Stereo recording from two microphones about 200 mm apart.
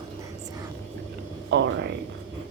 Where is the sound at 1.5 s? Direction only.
65° right (ahead or behind).